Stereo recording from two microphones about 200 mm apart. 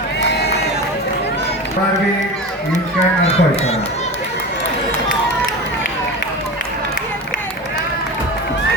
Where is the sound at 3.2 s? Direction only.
30° left (ahead or behind).